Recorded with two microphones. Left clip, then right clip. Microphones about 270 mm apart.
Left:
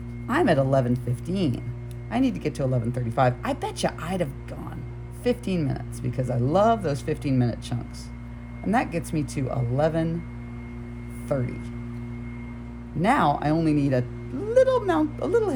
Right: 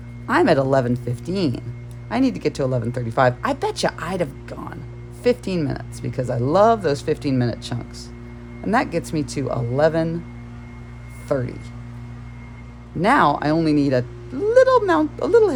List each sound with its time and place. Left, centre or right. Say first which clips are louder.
0.3 s speech: right 5 dB; right
11.3 s speech: right 5 dB; right
13.0 s speech: right 5 dB; right